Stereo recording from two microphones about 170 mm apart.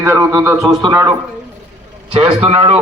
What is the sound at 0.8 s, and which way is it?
Speech, 25° right (ahead or behind).